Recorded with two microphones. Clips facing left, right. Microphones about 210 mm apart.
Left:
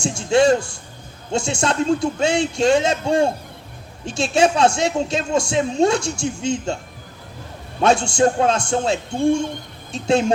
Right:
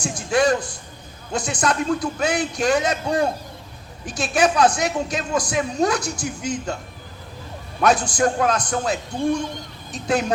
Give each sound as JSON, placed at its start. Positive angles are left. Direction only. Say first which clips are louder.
{"t": 0.0, "sound": "a woman's voice", "louder": "left 4 dB", "side_deg": 25}
{"t": 7.8, "sound": "a woman's voice", "louder": "left 3 dB", "side_deg": 25}